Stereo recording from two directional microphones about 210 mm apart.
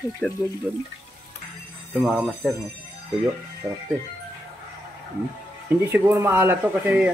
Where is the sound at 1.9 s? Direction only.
5° right (ahead or behind).